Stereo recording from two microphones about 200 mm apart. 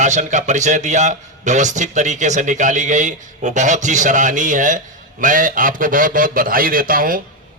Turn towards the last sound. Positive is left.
turn(degrees=-45)  # may be behind; listen again after turning